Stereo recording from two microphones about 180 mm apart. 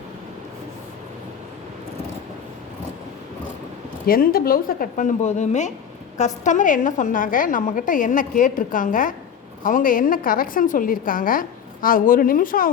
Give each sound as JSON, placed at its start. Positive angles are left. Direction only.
{"t": 4.0, "sound": "a woman's voice", "side_deg": 55}